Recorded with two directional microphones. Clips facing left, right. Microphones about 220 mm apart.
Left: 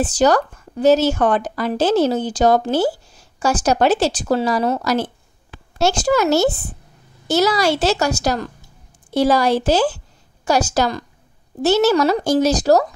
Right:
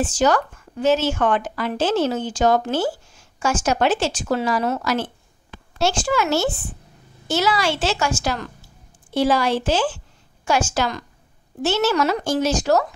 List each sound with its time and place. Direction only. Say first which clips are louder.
0.0 s a woman's voice: left 3 dB; 35° left (ahead or behind)